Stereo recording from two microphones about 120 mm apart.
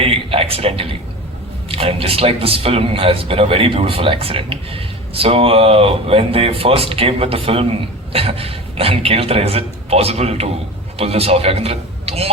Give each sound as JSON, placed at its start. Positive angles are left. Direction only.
{"t": 0.0, "sound": "a man's voice", "side_deg": -55}